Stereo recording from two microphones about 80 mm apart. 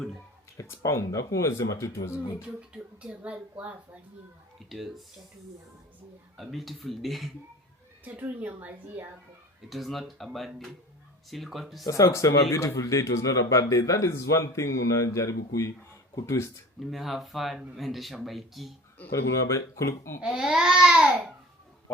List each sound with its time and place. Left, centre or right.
0.5 s speech: left
2.6 s speech: centre
4.7 s speech: centre
6.3 s speech: centre
8.0 s speech: right
9.6 s speech: centre
11.9 s speech: left
16.8 s speech: centre
19.1 s speech: left
20.2 s speech: centre